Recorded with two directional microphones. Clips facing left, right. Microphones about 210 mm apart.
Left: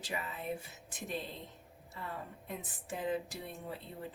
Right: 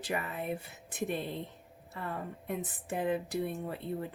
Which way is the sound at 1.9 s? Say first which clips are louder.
Right 5 dB; 60° right (ahead or behind).